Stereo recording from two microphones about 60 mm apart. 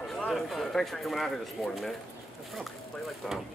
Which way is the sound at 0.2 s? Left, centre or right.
Centre.